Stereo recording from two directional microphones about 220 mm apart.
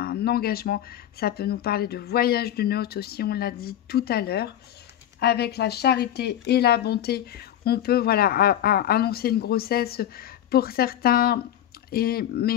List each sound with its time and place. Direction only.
0.0 s speech: 45° left (ahead or behind)